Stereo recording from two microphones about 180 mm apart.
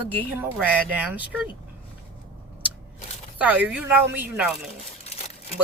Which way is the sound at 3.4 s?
5° right (ahead or behind).